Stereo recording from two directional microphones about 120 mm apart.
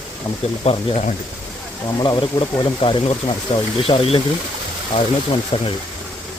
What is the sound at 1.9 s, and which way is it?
Speech, 40° left (ahead or behind).